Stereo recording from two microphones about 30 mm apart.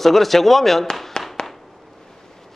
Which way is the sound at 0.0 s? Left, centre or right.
Centre.